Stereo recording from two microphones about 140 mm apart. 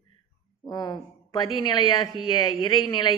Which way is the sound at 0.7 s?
30° left (ahead or behind).